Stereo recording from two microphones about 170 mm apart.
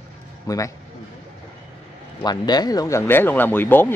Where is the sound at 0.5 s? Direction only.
20° left (ahead or behind).